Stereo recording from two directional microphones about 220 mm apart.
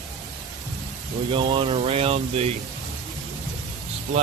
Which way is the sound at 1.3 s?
20° right (ahead or behind).